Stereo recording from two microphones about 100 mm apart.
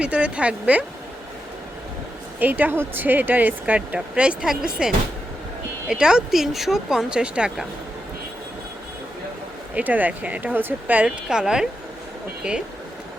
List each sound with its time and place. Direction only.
0.0 s speech: 10° right (ahead or behind)
2.4 s speech: 15° right (ahead or behind)
5.9 s speech: 5° right (ahead or behind)
9.7 s speech: 15° right (ahead or behind)